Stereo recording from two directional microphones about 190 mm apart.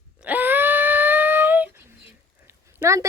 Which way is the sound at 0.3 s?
10° right (ahead or behind).